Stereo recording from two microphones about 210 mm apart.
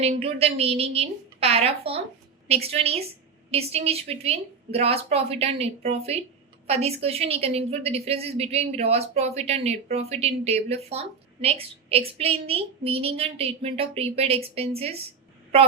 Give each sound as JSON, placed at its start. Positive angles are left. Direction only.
{"t": 0.0, "sound": "a woman's voice", "side_deg": -30}